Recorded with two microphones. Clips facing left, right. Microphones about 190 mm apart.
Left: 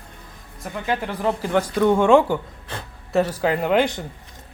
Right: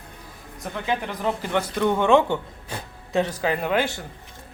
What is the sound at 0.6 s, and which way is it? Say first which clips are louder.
Speech: left 2 dB; 5° left (ahead or behind).